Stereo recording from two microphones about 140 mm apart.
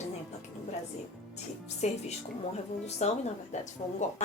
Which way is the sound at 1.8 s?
55° left (ahead or behind).